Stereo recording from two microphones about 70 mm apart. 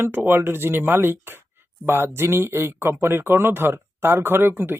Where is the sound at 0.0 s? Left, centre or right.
Right.